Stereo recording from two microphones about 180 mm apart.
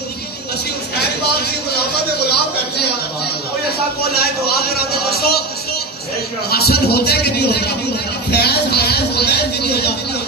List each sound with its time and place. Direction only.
0.9 s a man's voice: 60° left (ahead or behind)
4.1 s a man's voice: 60° left (ahead or behind)
6.5 s a man's voice: 60° left (ahead or behind)